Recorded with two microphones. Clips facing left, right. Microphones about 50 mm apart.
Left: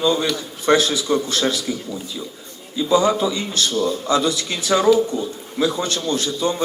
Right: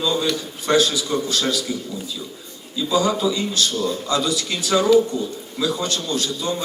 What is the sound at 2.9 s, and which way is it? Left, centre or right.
A man's voice, left.